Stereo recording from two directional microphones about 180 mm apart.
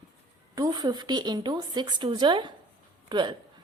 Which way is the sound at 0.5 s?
20° right (ahead or behind).